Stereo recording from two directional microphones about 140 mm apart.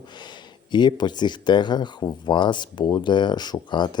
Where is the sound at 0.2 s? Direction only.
30° left (ahead or behind).